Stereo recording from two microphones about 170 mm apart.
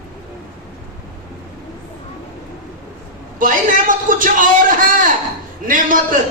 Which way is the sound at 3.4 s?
50° right (ahead or behind).